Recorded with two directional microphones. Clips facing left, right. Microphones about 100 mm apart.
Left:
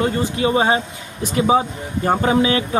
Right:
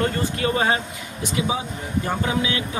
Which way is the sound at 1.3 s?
40° left (ahead or behind).